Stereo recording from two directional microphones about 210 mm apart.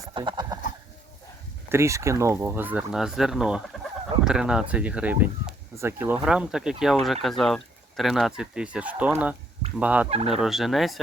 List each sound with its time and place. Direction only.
0.0 s horse: 20° right (ahead or behind)
1.7 s speech: 15° right (ahead or behind)
10.1 s fowl: 30° right (ahead or behind)
10.4 s speech: centre (ahead or behind)